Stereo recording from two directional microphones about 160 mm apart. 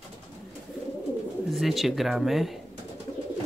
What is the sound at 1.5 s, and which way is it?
Speech, centre (ahead or behind).